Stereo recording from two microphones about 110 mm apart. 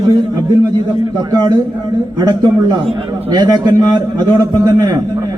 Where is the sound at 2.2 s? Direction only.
40° right (ahead or behind).